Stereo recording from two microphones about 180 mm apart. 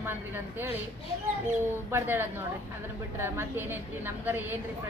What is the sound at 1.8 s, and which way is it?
Speech, 15° right (ahead or behind).